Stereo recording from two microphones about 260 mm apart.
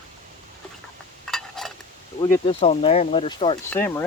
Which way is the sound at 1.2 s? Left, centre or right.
Centre.